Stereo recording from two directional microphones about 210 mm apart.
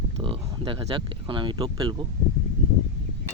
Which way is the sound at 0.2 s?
25° right (ahead or behind).